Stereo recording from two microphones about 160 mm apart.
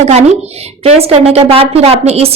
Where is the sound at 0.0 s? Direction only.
40° right (ahead or behind).